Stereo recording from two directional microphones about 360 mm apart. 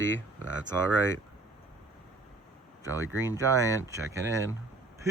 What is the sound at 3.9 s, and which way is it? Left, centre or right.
Speech, centre.